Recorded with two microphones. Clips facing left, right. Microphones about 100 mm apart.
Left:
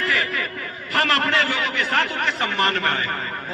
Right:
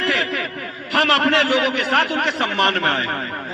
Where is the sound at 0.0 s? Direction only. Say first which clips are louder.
Right 2 dB; 80° right.